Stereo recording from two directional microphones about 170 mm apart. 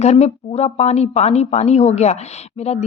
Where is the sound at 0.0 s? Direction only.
40° left (ahead or behind).